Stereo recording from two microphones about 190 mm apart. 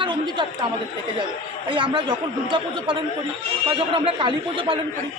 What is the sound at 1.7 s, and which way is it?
A man's voice, 25° right (ahead or behind).